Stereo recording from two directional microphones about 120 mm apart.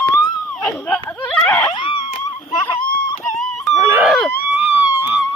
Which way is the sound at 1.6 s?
45° left (ahead or behind).